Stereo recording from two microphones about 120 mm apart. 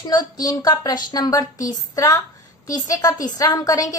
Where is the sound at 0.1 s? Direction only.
35° left (ahead or behind).